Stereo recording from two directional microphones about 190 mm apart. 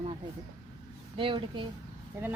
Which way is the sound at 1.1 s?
25° right (ahead or behind).